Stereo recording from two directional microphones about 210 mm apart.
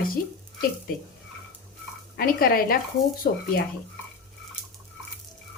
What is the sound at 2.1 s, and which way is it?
Speech, 45° left (ahead or behind).